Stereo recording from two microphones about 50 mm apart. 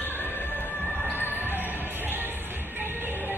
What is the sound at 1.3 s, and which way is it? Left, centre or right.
Music, right.